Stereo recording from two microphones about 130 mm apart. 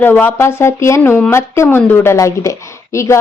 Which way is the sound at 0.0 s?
15° left (ahead or behind).